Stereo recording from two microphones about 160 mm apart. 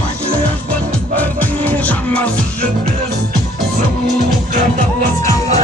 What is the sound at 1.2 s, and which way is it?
Music, 10° left (ahead or behind).